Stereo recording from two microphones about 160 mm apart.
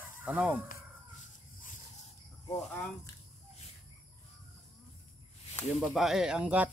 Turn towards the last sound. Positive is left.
turn(degrees=-10)  # may be behind; listen again after turning